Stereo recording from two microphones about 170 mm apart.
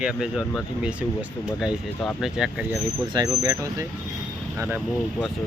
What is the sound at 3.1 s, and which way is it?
Speech, 20° right (ahead or behind).